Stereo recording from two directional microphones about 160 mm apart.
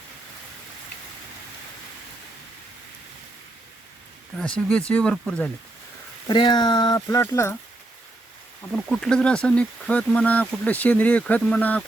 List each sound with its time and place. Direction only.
4.4 s speech: 5° left (ahead or behind)
6.2 s speech: 30° left (ahead or behind)
8.7 s speech: 5° left (ahead or behind)